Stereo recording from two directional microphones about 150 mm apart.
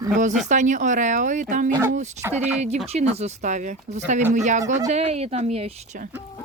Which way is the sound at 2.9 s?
45° right (ahead or behind).